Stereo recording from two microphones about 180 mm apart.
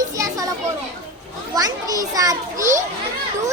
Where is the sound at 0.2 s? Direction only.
20° right (ahead or behind).